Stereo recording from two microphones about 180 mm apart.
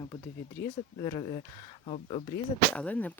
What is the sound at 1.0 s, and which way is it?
Speech, 30° left (ahead or behind).